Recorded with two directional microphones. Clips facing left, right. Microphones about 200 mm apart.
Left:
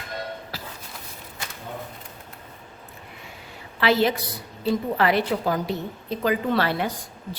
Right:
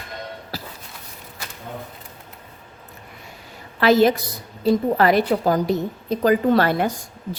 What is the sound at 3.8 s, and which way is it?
A woman's voice, 45° right (ahead or behind).